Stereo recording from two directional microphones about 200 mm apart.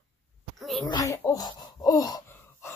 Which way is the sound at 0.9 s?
15° left (ahead or behind).